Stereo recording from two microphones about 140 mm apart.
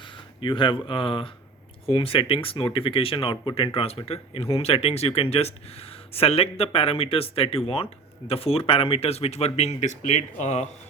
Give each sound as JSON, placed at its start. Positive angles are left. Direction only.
{"t": 0.4, "sound": "speech", "side_deg": 35}